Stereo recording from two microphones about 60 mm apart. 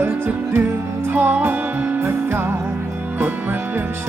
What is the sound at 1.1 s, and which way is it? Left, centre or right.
Music, right.